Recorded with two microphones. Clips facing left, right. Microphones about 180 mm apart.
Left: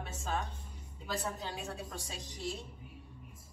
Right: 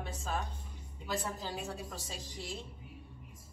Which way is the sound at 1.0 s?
Centre (ahead or behind).